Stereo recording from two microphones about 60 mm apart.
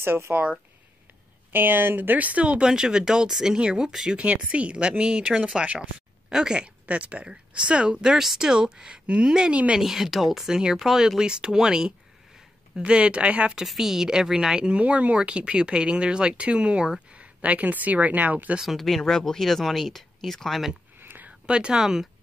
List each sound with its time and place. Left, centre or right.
0.0 s speech: right
0.3 s a woman's voice: right
13.6 s a woman's voice: centre; by 18.6 s right
18.6 s speech: centre
21.0 s a sound: right
21.5 s a woman's voice: centre